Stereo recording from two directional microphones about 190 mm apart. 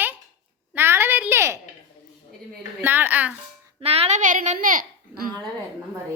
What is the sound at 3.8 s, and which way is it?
A child's voice, 30° right (ahead or behind).